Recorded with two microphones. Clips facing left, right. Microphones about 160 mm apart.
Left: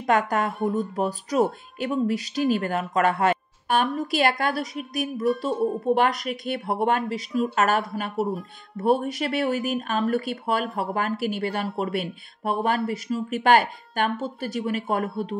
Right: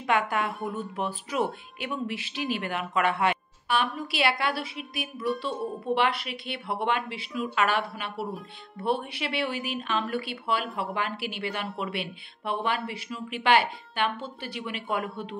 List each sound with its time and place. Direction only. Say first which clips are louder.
0.0 s a woman's voice: left 4 dB; 40° left (ahead or behind)